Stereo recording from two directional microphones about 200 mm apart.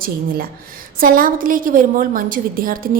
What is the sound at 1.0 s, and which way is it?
A woman's voice, 45° right (ahead or behind).